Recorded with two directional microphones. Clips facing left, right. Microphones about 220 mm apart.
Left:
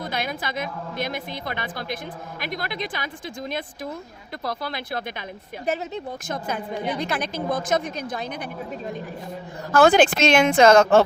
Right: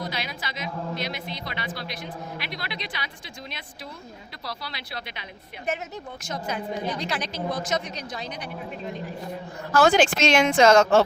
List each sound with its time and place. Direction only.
0.0 s a woman's voice: 50° left (ahead or behind)
4.4 s a woman's voice: 50° left (ahead or behind)
6.2 s a woman's voice: 55° left (ahead or behind)
9.7 s speech: 55° left (ahead or behind)